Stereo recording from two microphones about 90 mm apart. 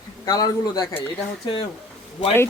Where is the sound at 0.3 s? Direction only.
40° left (ahead or behind).